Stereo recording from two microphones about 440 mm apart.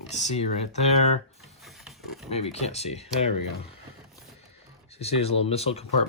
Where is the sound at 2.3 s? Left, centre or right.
Centre.